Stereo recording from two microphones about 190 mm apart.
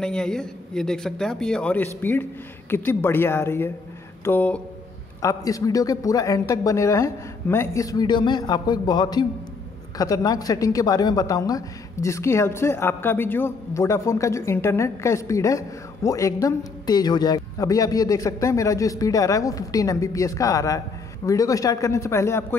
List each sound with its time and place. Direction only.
0.0 s a woman's voice: 5° left (ahead or behind)